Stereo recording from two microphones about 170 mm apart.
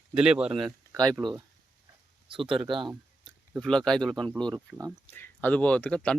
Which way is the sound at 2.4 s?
Centre (ahead or behind).